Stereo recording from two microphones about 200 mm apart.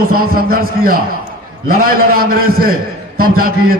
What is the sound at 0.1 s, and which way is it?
Mantra, 45° right (ahead or behind).